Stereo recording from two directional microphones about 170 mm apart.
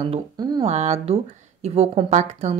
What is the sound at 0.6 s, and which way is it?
A woman's voice, 40° right (ahead or behind).